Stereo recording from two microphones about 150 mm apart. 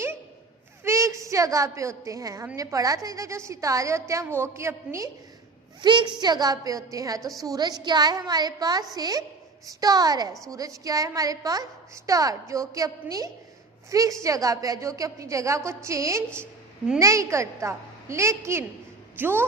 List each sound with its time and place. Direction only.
0.9 s a woman's voice: 20° right (ahead or behind)
5.8 s a woman's voice: 30° right (ahead or behind); by 19.5 s 15° right (ahead or behind)